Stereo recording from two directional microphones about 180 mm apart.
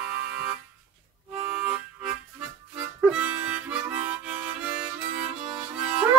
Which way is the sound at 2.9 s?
5° right (ahead or behind).